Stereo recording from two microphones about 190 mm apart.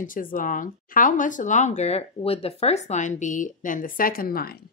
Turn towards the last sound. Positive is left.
turn(degrees=50)  # may be behind; listen again after turning